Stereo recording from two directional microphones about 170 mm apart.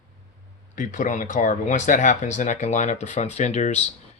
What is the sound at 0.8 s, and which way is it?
Speech, 50° left (ahead or behind).